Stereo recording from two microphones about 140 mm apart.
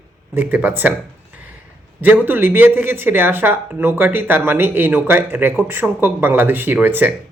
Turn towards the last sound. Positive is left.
turn(degrees=-15)  # may be behind; listen again after turning